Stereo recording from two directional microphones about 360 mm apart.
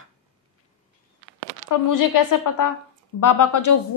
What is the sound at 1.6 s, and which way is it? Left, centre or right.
A woman's voice, left.